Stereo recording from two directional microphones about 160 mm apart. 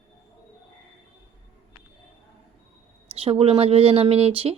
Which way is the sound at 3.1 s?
40° right (ahead or behind).